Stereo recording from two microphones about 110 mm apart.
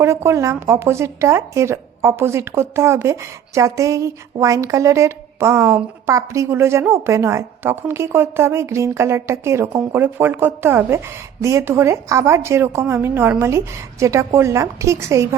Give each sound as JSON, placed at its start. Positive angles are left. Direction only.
{"t": 0.0, "sound": "speech", "side_deg": -25}